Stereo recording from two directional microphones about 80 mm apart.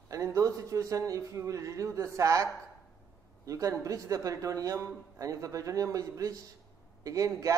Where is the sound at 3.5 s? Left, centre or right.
Right.